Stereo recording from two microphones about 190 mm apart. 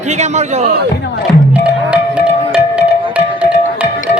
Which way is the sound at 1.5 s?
5° right (ahead or behind).